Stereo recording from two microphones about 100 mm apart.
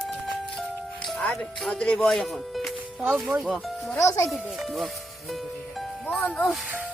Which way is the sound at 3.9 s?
30° left (ahead or behind).